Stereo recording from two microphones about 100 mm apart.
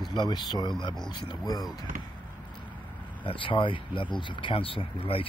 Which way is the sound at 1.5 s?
40° left (ahead or behind).